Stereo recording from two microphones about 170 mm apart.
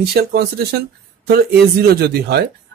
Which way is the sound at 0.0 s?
70° right (ahead or behind).